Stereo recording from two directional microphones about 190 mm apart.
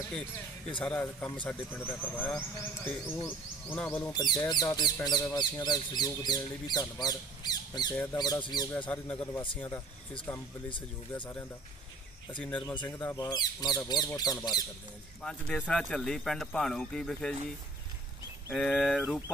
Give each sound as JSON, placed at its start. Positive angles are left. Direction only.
{"t": 0.8, "sound": "speech", "side_deg": 5}
{"t": 4.1, "sound": "speech", "side_deg": 20}
{"t": 7.9, "sound": "speech", "side_deg": 10}
{"t": 8.2, "sound": "speech", "side_deg": 20}
{"t": 8.9, "sound": "speech", "side_deg": 10}
{"t": 12.4, "sound": "speech", "side_deg": 5}
{"t": 13.1, "sound": "speech", "side_deg": 20}
{"t": 15.2, "sound": "speech", "side_deg": 5}
{"t": 18.5, "sound": "speech", "side_deg": 0}